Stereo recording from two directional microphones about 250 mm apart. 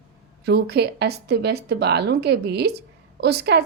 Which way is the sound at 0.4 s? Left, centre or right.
Right.